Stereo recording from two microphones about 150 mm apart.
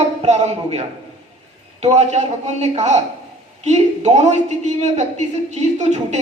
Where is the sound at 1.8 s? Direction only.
50° right (ahead or behind).